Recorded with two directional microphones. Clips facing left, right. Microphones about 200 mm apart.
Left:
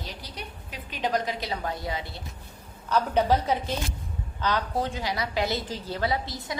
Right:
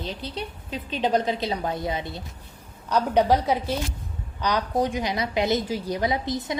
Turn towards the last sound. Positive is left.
turn(degrees=-20)  # may be behind; listen again after turning